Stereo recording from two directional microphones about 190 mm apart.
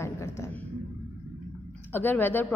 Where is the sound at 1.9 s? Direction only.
10° left (ahead or behind).